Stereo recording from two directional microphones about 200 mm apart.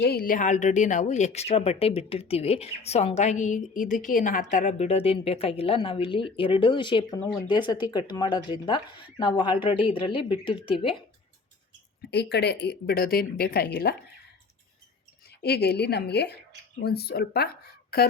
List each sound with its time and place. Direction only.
0.0 s speech: 50° left (ahead or behind); by 11.0 s 25° left (ahead or behind)
12.1 s speech: 55° left (ahead or behind)
15.4 s a woman's voice: 55° left (ahead or behind)